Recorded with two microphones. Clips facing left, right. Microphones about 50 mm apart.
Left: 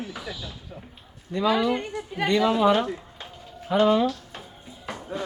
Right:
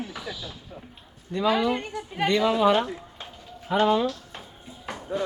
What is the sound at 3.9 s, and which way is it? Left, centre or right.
Speech, centre.